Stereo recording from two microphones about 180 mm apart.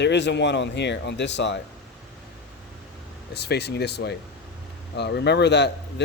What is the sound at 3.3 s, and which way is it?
Speech, 65° left (ahead or behind).